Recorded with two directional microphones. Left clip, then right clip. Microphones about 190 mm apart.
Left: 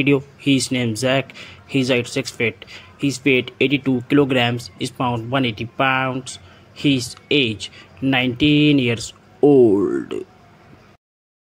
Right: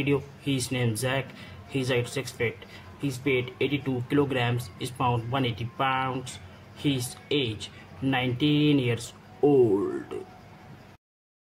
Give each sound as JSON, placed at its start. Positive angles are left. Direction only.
{"t": 0.0, "sound": "speech", "side_deg": 30}